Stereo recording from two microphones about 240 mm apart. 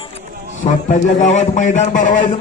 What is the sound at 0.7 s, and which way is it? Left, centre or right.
Speech, left.